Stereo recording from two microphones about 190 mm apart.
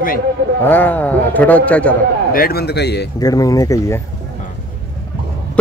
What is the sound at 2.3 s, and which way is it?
Speech, 50° left (ahead or behind).